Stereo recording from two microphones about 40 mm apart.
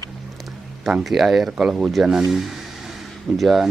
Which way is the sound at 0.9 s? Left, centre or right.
Centre.